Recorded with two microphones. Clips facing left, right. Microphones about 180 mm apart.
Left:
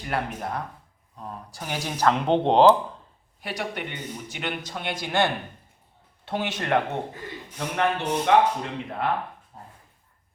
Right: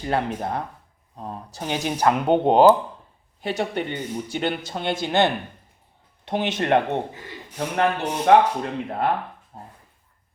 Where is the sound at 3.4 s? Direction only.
25° right (ahead or behind).